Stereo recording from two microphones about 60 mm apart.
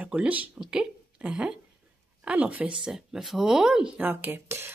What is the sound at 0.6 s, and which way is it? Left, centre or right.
A woman's voice, centre.